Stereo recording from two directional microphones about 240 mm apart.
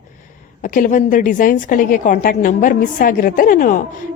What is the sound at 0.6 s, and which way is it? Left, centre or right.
A woman's voice, left.